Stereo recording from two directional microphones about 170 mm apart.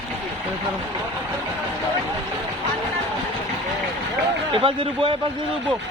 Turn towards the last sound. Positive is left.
turn(degrees=-30)  # may be behind; listen again after turning